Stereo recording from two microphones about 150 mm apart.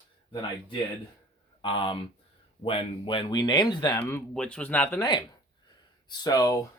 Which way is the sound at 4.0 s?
15° left (ahead or behind).